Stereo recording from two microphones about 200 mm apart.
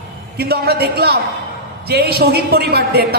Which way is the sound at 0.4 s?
50° right (ahead or behind).